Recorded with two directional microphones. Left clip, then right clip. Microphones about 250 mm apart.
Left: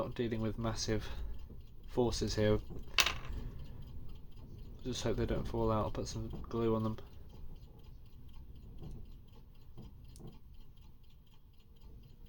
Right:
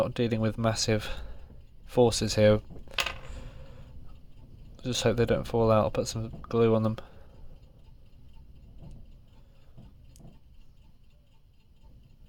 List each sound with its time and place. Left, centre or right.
0.0 s speech: right
4.8 s speech: right